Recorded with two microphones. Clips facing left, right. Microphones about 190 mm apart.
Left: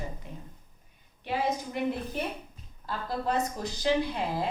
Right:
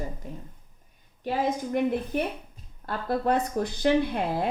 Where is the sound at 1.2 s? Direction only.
50° right (ahead or behind).